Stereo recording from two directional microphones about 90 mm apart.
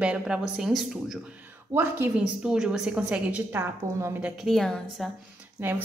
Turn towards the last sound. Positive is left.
turn(degrees=-25)  # may be behind; listen again after turning